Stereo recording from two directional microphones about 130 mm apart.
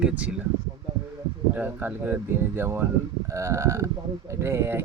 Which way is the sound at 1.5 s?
15° right (ahead or behind).